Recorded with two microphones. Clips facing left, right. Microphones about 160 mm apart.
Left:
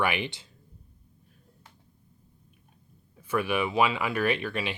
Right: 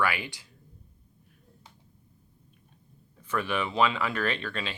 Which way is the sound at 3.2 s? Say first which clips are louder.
Left 3 dB; 10° left (ahead or behind).